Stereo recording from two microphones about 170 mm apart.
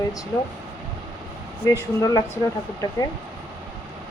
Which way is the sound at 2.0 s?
20° left (ahead or behind).